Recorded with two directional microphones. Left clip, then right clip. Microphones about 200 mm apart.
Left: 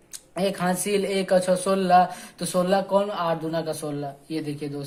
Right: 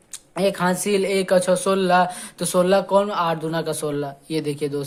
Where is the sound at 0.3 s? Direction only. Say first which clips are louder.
Right 4 dB; 30° right (ahead or behind).